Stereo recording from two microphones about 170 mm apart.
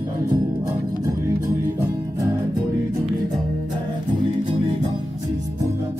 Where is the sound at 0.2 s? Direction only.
20° right (ahead or behind).